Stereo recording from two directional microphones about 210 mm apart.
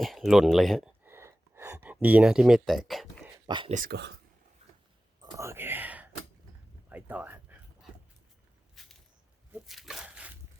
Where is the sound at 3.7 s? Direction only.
45° right (ahead or behind).